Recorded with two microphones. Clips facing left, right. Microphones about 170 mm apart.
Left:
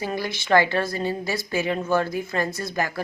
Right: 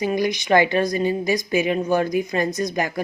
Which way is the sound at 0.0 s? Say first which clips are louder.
Right 7 dB; 15° right (ahead or behind).